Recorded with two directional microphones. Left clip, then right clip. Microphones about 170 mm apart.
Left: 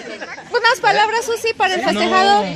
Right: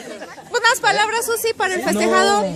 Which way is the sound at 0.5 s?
15° left (ahead or behind).